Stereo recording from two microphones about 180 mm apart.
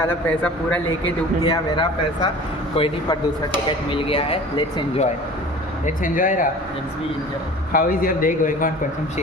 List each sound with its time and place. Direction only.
0.1 s a man's voice: 10° left (ahead or behind)
1.5 s speech: 25° left (ahead or behind)
5.8 s a man's voice: 45° left (ahead or behind)
7.7 s a man's voice: 50° left (ahead or behind)